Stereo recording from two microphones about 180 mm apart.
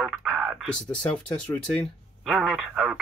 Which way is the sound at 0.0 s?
Centre (ahead or behind).